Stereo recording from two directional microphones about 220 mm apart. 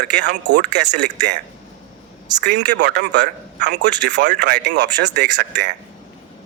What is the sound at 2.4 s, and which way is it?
Speech, 50° right (ahead or behind).